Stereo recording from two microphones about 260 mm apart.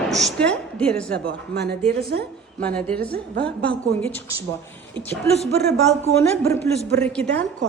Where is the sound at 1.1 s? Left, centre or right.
Right.